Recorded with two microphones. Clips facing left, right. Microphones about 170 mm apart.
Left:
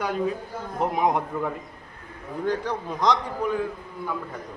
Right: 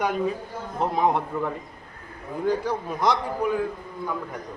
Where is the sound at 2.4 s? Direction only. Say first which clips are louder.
Right 2 dB; 10° right (ahead or behind).